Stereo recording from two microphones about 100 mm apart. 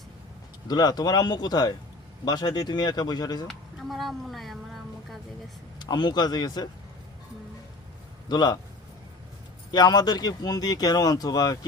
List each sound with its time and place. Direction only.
0.7 s speech: 45° left (ahead or behind)
3.4 s a sound: centre (ahead or behind)
5.8 s speech: 45° left (ahead or behind)
8.3 s speech: 45° left (ahead or behind)
9.7 s speech: 40° left (ahead or behind)